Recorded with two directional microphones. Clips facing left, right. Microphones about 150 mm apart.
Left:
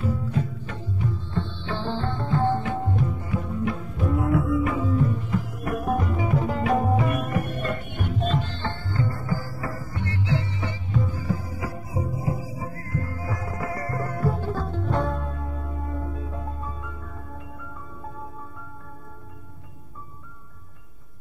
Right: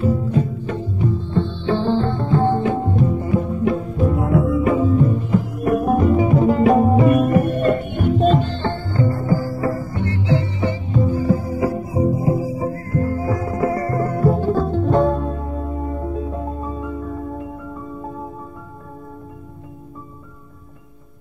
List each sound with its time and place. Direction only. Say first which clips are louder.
0.0 s music: right 8 dB; 25° right (ahead or behind)
12.5 s music: right 10 dB; 30° right (ahead or behind)